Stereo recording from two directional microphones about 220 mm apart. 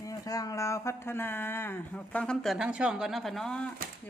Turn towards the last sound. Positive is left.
turn(degrees=5)  # may be behind; listen again after turning